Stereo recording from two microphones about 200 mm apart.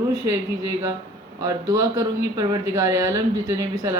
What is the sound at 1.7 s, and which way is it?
A woman's voice, 20° right (ahead or behind).